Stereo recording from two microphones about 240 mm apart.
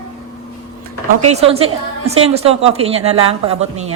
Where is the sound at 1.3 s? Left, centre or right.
Right.